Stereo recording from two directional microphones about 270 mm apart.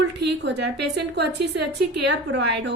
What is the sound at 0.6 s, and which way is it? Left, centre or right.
Speech, right.